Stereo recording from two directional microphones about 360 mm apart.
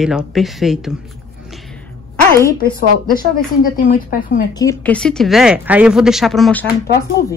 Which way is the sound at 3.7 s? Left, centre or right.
Left.